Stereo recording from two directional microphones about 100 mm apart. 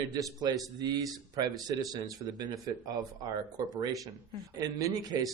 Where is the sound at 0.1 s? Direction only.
40° right (ahead or behind).